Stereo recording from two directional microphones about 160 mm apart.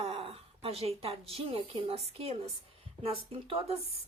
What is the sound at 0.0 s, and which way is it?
Speech, 35° right (ahead or behind).